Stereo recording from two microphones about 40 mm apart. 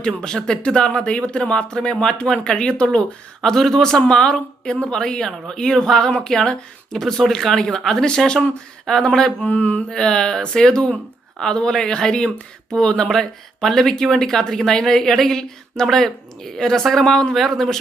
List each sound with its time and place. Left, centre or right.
0.2 s speech: centre
3.4 s speech: centre
9.5 s mantra: left
9.9 s speech: centre